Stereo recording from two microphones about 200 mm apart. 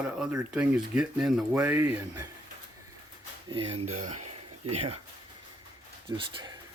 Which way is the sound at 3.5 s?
30° right (ahead or behind).